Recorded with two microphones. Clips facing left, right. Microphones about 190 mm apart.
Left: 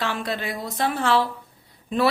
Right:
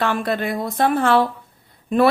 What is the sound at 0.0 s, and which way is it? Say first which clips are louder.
A woman's voice: right 6 dB; 55° right (ahead or behind).